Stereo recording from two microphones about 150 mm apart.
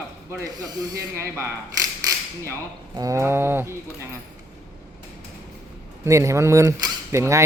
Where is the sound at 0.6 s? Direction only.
20° right (ahead or behind).